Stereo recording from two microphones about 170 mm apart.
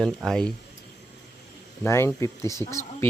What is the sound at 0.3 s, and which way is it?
Speech, 5° left (ahead or behind).